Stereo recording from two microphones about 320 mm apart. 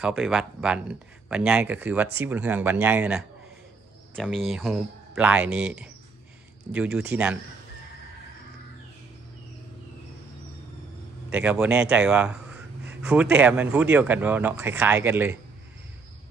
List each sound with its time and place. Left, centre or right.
0.0 s speech: centre
11.2 s speech: centre